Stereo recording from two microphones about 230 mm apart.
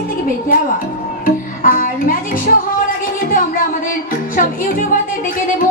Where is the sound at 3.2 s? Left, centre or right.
Left.